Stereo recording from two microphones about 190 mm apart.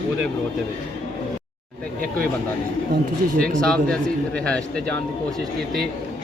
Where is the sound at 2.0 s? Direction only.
50° right (ahead or behind).